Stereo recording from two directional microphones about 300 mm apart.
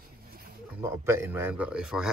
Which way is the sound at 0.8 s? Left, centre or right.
Centre.